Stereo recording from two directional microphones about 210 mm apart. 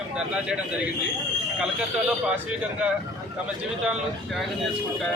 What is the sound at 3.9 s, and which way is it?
Speech, centre (ahead or behind).